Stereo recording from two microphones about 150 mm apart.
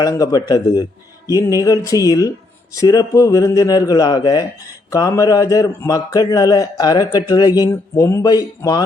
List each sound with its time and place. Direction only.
0.0 s speech: 25° left (ahead or behind)